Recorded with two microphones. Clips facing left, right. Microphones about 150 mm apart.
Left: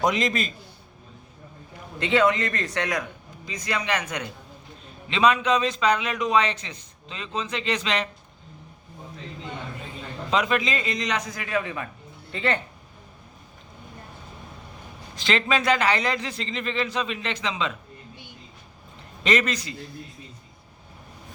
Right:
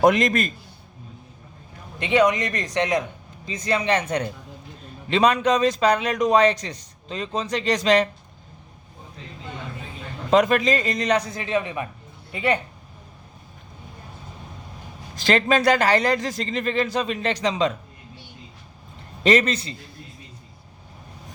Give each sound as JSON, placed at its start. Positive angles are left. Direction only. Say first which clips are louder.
{"t": 0.0, "sound": "a man's voice", "louder": "right 6 dB", "side_deg": -55}
{"t": 2.0, "sound": "a man's voice", "louder": "right 2 dB", "side_deg": -15}
{"t": 5.0, "sound": "a man's voice", "louder": "right 2 dB", "side_deg": -45}
{"t": 10.3, "sound": "a man's voice", "louder": "right 6 dB", "side_deg": -45}
{"t": 15.1, "sound": "a man's voice", "louder": "right 5 dB", "side_deg": -40}
{"t": 19.2, "sound": "a man's voice", "louder": "right 5 dB", "side_deg": -35}